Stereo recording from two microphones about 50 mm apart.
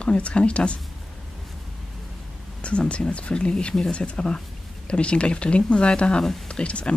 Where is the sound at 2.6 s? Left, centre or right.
Left.